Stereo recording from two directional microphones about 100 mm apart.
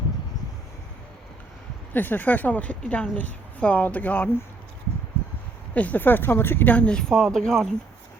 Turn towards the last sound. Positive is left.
turn(degrees=0)  # may be behind; listen again after turning